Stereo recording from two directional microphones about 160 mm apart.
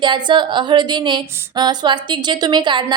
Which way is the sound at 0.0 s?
30° right (ahead or behind).